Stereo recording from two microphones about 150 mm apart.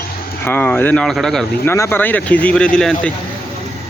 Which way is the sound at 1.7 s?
15° left (ahead or behind).